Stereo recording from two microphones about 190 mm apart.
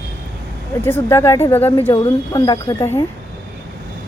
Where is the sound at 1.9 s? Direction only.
20° left (ahead or behind).